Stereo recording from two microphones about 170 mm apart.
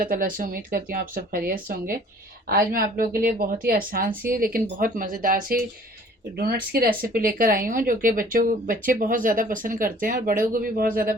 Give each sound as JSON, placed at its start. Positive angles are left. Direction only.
{"t": 0.0, "sound": "speech", "side_deg": -55}